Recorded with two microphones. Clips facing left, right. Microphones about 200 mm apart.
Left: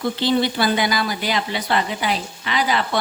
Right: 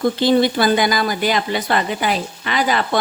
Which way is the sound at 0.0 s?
45° right (ahead or behind).